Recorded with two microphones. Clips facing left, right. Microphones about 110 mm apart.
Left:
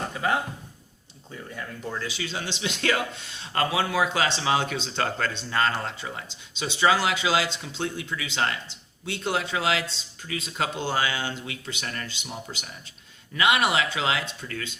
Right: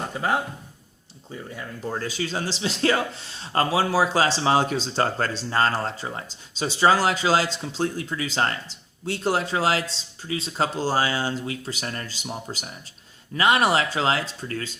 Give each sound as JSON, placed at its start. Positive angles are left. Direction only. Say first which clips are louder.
{"t": 1.9, "sound": "speech", "louder": "right 5 dB", "side_deg": -45}